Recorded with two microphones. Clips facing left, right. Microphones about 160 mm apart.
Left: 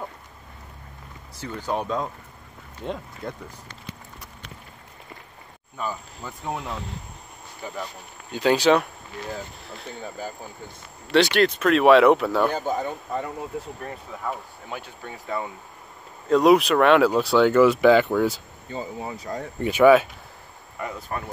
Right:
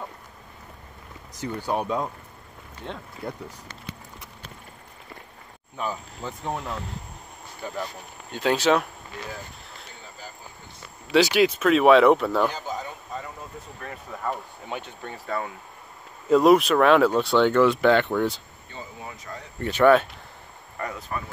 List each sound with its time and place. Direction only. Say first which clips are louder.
1.7 s speech: even; 10° right (ahead or behind)
3.2 s speech: right 1 dB; 5° right (ahead or behind)
5.8 s speech: even; 15° right (ahead or behind)
6.4 s speech: left 1 dB; 5° left (ahead or behind)
11.1 s speech: even; 5° right (ahead or behind)
12.4 s speech: left 5 dB; 55° left (ahead or behind)
14.1 s speech: right 3 dB; centre (ahead or behind)
16.3 s speech: even; centre (ahead or behind)
18.7 s speech: left 8 dB; 30° left (ahead or behind)
19.6 s speech: left 2 dB; 10° left (ahead or behind)
21.1 s speech: left 2 dB; 40° left (ahead or behind)